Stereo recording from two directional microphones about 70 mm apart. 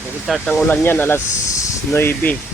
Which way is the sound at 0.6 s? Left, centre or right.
Left.